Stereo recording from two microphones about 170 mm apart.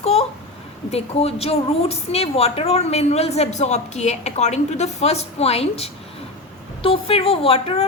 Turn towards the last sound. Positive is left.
turn(degrees=35)  # may be behind; listen again after turning